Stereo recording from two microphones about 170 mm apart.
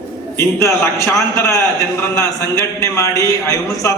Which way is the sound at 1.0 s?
15° left (ahead or behind).